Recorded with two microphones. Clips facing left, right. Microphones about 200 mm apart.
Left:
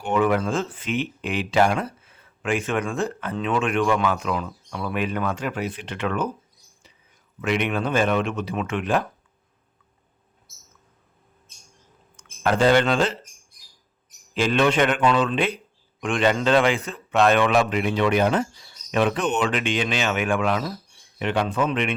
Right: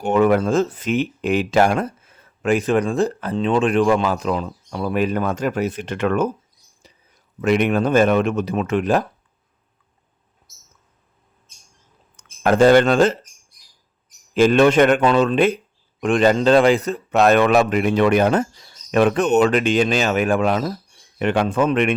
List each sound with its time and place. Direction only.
0.0 s speech: 40° right (ahead or behind)
6.8 s a sound: 40° right (ahead or behind)
7.4 s speech: 40° right (ahead or behind)
12.1 s speech: 45° right (ahead or behind)
14.3 s speech: 45° right (ahead or behind)